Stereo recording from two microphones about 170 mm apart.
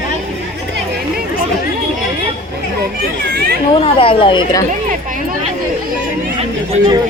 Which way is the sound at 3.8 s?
30° left (ahead or behind).